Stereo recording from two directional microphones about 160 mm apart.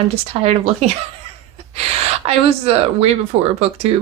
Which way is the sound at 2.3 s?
40° right (ahead or behind).